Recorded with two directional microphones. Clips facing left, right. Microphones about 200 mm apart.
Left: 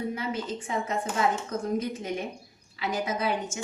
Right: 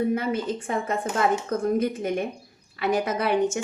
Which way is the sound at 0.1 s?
55° right (ahead or behind).